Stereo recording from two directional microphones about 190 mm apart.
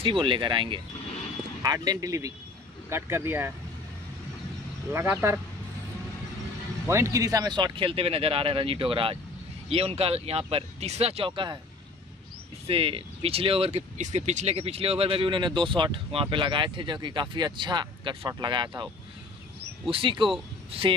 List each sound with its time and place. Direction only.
0.0 s speech: 25° right (ahead or behind)
4.9 s speech: 10° right (ahead or behind)
6.9 s speech: 15° right (ahead or behind)
12.6 s speech: 30° right (ahead or behind)
19.9 s speech: 25° right (ahead or behind)